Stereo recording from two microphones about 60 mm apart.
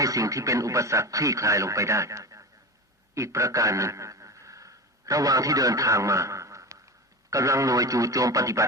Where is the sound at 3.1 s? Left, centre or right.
Right.